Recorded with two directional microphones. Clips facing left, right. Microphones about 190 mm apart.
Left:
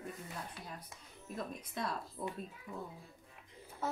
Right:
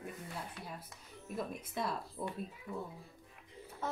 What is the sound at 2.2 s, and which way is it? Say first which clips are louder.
Speech: even; 20° right (ahead or behind).